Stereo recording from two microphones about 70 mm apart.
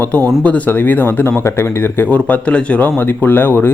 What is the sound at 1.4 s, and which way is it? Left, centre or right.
Speech, left.